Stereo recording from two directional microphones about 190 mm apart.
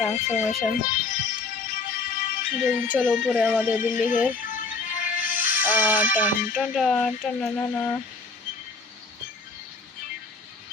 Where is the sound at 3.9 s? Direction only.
40° left (ahead or behind).